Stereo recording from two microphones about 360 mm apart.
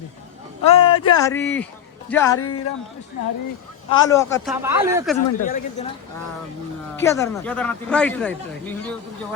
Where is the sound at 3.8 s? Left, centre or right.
Centre.